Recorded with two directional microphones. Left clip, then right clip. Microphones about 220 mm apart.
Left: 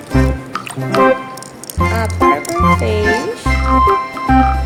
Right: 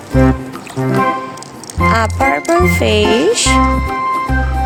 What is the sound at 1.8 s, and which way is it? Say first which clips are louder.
Music: right 4 dB; centre (ahead or behind).